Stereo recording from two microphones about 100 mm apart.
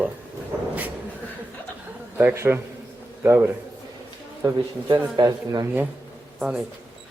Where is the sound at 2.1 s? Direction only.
25° right (ahead or behind).